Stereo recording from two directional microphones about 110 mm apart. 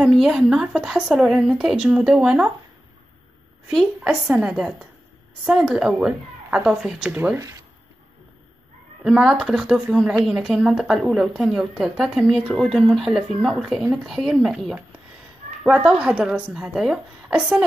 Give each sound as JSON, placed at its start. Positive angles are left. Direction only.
{"t": 0.0, "sound": "speech", "side_deg": -5}
{"t": 3.7, "sound": "speech", "side_deg": -5}
{"t": 7.3, "sound": "speech", "side_deg": -30}
{"t": 9.0, "sound": "speech", "side_deg": -5}